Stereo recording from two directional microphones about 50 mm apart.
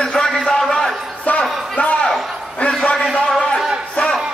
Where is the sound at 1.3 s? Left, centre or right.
Left.